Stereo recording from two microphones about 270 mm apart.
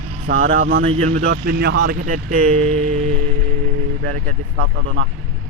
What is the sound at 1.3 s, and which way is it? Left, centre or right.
Speech, right.